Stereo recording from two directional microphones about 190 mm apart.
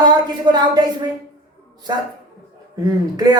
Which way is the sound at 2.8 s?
20° right (ahead or behind).